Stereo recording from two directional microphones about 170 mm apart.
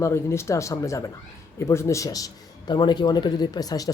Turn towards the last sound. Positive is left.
turn(degrees=20)  # may be behind; listen again after turning